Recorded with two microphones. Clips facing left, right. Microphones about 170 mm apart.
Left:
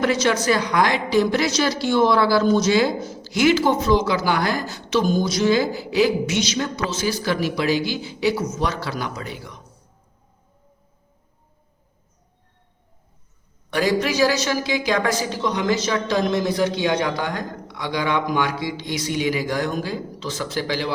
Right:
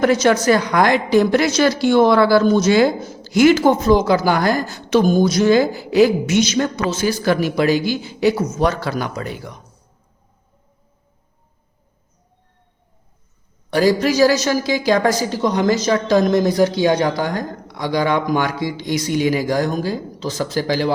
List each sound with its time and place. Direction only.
0.0 s a woman's voice: 45° right (ahead or behind)
13.7 s a woman's voice: 35° right (ahead or behind)